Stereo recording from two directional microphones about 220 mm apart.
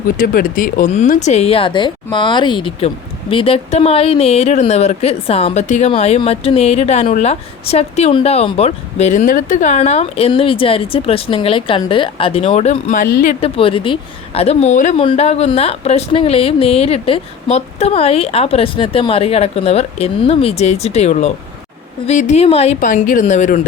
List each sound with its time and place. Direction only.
0.2 s a woman's voice: 40° left (ahead or behind)